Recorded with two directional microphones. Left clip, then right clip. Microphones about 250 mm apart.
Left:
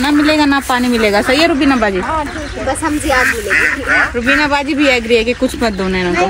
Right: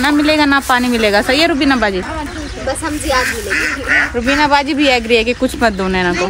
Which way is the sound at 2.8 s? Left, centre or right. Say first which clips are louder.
Left 3 dB; centre.